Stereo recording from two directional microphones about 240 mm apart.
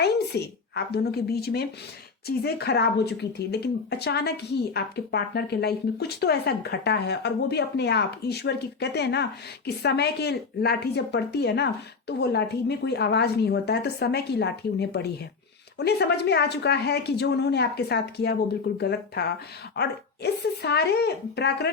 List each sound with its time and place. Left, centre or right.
0.0 s a woman's voice: left